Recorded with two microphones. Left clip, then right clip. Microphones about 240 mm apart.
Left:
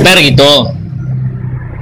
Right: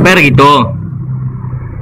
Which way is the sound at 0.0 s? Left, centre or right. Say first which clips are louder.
Even; centre.